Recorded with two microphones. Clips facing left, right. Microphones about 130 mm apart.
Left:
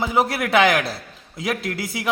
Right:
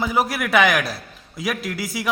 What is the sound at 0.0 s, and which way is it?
A man's voice, 25° left (ahead or behind).